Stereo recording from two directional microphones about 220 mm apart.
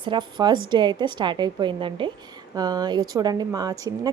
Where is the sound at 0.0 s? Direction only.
20° right (ahead or behind).